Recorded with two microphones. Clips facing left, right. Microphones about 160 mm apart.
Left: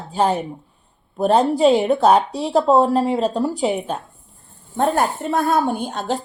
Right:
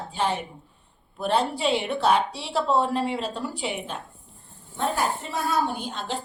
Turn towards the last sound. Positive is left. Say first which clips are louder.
# left 8 dB
turn(degrees=45)  # may be behind; listen again after turning